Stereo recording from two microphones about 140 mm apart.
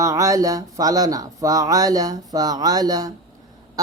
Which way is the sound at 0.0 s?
25° right (ahead or behind).